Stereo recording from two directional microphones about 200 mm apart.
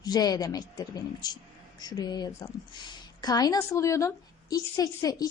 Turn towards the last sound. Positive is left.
turn(degrees=20)  # may be behind; listen again after turning